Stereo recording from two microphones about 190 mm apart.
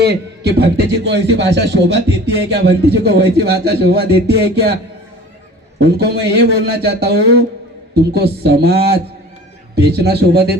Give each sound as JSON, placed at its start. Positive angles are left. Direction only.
{"t": 0.0, "sound": "a man's voice", "side_deg": -60}
{"t": 5.8, "sound": "a man's voice", "side_deg": -60}